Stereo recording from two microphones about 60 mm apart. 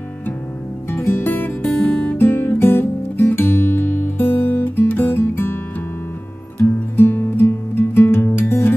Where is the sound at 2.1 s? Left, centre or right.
Left.